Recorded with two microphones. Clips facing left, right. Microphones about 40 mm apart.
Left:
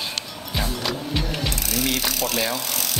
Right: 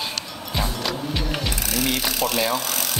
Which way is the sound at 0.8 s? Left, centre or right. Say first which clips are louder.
Even; centre.